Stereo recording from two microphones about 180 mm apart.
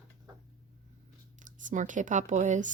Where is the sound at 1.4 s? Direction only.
45° right (ahead or behind).